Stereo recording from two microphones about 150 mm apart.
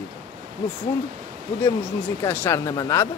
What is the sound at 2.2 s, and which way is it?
Speech, 15° left (ahead or behind).